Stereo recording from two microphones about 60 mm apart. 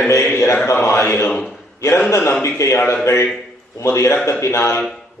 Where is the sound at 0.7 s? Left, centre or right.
Left.